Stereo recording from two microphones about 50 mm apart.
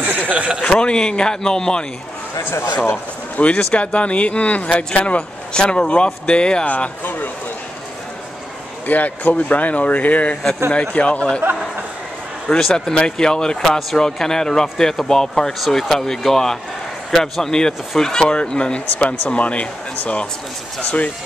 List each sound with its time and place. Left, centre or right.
0.0 s chuckle: right
0.6 s speech: centre
3.3 s speech: left
6.7 s speech: left
8.8 s speech: left
12.5 s speech: centre; by 20.2 s left